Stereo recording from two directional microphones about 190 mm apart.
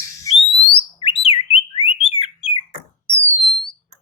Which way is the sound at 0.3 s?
15° left (ahead or behind).